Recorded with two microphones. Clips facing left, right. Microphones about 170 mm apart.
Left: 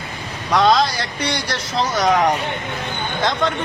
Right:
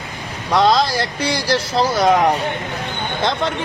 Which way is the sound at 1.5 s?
30° right (ahead or behind).